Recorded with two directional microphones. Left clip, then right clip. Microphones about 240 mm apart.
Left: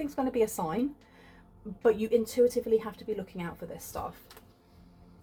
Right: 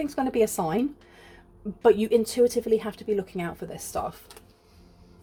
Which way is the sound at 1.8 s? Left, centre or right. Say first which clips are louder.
Right 5 dB; right.